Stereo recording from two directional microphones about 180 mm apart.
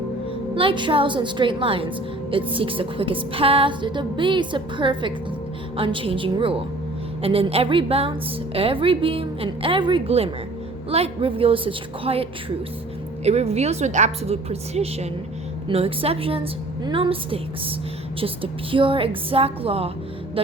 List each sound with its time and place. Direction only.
0.5 s music: 30° right (ahead or behind)
7.2 s a woman's voice: 30° right (ahead or behind)